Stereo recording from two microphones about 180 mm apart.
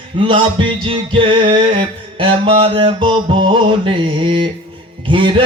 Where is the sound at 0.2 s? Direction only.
25° right (ahead or behind).